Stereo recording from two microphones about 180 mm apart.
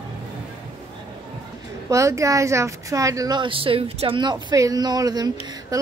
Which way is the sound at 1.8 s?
15° right (ahead or behind).